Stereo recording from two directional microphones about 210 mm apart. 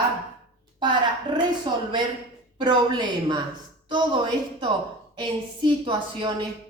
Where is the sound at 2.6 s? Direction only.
20° right (ahead or behind).